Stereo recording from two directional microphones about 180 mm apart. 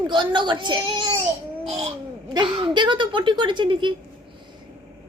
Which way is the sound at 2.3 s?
25° right (ahead or behind).